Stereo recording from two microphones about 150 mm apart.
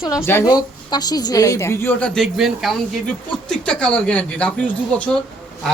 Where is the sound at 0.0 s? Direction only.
15° left (ahead or behind).